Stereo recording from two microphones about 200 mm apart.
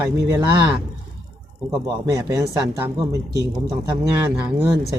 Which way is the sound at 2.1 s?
15° right (ahead or behind).